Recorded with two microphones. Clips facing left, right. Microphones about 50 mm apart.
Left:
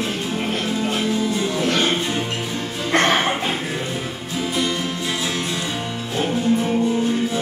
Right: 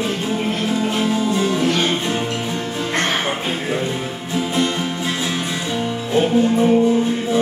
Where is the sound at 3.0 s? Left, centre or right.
Left.